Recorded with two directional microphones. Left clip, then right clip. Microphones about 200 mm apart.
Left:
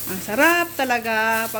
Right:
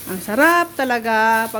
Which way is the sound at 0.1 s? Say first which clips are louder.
Right 3 dB; 20° right (ahead or behind).